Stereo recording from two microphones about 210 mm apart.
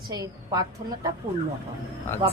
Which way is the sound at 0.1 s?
15° right (ahead or behind).